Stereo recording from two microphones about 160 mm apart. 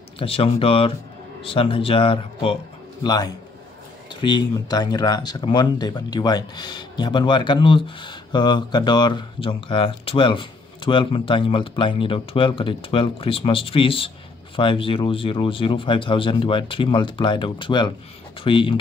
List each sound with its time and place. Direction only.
0.2 s a man's voice: 35° left (ahead or behind)